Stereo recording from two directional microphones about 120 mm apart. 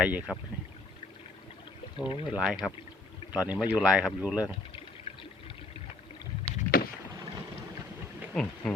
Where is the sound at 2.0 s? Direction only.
45° left (ahead or behind).